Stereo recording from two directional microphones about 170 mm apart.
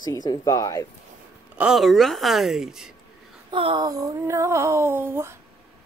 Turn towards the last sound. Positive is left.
turn(degrees=-15)  # may be behind; listen again after turning